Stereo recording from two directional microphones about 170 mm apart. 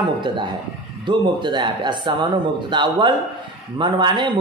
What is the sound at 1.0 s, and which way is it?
Speech, 25° right (ahead or behind).